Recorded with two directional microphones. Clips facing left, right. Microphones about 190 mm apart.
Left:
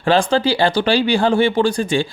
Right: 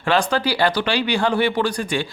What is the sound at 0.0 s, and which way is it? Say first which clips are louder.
Speech: left 4 dB; 30° left (ahead or behind).